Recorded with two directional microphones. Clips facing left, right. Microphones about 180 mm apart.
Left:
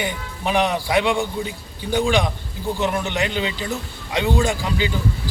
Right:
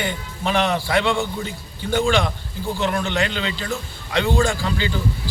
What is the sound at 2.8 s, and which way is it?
A man's voice, 15° left (ahead or behind).